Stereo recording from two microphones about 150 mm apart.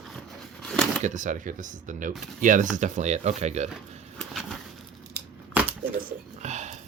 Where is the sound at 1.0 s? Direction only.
55° right (ahead or behind).